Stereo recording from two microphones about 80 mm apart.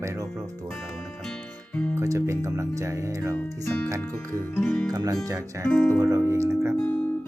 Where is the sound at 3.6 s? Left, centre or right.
Left.